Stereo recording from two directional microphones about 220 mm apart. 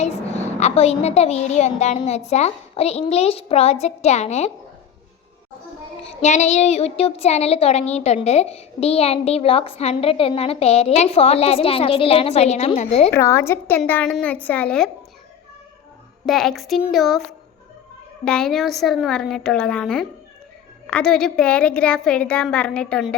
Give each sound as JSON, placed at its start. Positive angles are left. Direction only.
{"t": 0.6, "sound": "a woman's voice", "side_deg": 30}
{"t": 6.1, "sound": "a woman's voice", "side_deg": 30}
{"t": 13.1, "sound": "a woman's voice", "side_deg": 10}
{"t": 16.2, "sound": "a woman's voice", "side_deg": 0}